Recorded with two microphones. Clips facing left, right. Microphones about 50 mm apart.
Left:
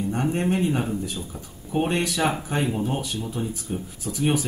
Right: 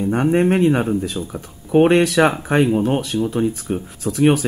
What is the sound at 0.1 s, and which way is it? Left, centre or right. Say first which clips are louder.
Speech: right 9 dB; right.